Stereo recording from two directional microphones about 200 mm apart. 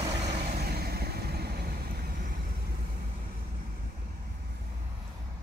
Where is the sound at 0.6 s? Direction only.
50° right (ahead or behind).